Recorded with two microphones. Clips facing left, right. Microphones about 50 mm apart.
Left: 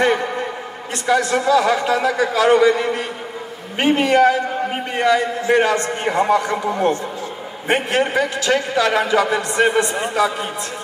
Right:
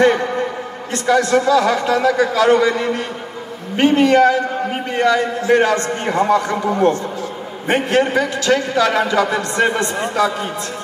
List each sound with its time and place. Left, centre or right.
1.0 s a man's voice: centre